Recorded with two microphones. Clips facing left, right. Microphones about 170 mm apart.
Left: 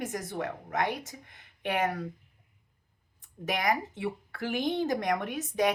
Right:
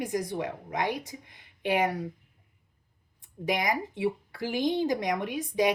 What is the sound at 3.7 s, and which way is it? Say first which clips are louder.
Speech: right 1 dB; 15° right (ahead or behind).